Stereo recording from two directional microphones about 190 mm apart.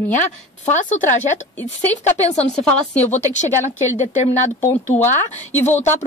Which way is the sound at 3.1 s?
40° left (ahead or behind).